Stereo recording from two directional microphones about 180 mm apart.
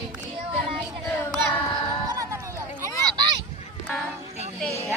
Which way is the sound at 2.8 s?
25° right (ahead or behind).